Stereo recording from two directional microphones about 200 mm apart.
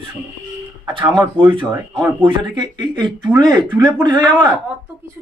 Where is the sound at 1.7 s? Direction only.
20° right (ahead or behind).